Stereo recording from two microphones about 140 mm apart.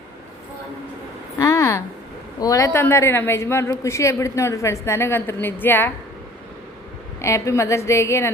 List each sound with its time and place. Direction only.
1.4 s a sound: 20° left (ahead or behind)
2.4 s a woman's voice: 25° left (ahead or behind)
7.2 s a woman's voice: 20° left (ahead or behind)